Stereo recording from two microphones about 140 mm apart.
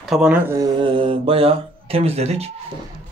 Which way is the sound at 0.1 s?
5° right (ahead or behind).